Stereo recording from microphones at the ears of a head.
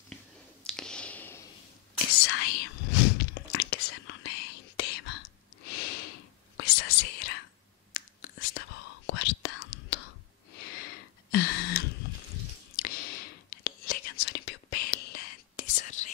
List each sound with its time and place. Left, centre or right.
2.0 s whispering: left